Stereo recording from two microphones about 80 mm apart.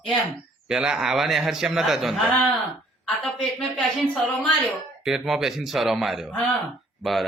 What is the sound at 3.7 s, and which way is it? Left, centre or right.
A man's voice, centre.